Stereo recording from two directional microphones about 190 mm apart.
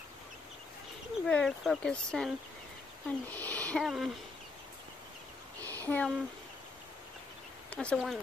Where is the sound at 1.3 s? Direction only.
Centre (ahead or behind).